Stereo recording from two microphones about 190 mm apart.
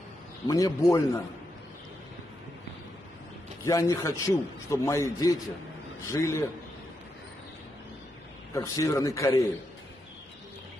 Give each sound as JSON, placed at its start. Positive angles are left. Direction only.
{"t": 0.5, "sound": "a man's voice", "side_deg": 20}
{"t": 3.6, "sound": "a man's voice", "side_deg": 15}
{"t": 8.5, "sound": "a man's voice", "side_deg": 15}